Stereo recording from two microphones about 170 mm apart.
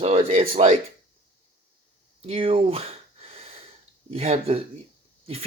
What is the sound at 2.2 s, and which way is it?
Speech, 35° right (ahead or behind).